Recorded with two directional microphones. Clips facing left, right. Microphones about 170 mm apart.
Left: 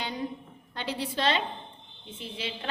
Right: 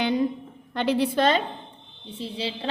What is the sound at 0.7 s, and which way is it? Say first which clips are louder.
Speech: right 11 dB; 65° right (ahead or behind).